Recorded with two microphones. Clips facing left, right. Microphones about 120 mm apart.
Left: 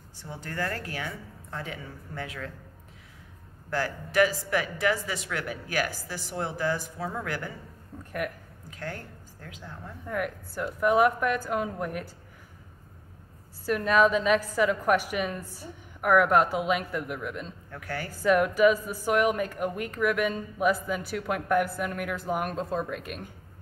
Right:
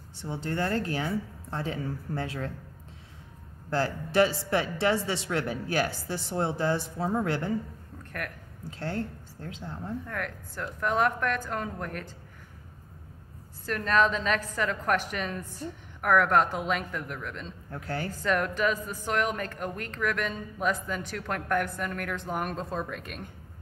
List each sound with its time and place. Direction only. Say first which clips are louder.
0.2 s a woman's voice: right 3 dB; 25° right (ahead or behind)
3.7 s a woman's voice: right 1 dB; 30° right (ahead or behind)
8.6 s a woman's voice: right 5 dB; 30° right (ahead or behind)
10.0 s a woman's voice: left 4 dB; 10° left (ahead or behind)
13.7 s a woman's voice: left 3 dB; 10° left (ahead or behind)
17.6 s a woman's voice: right 5 dB; 30° right (ahead or behind)
18.1 s a woman's voice: left 6 dB; 5° left (ahead or behind)